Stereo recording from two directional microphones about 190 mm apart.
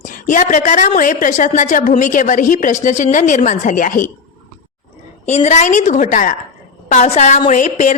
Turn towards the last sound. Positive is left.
turn(degrees=40)  # may be behind; listen again after turning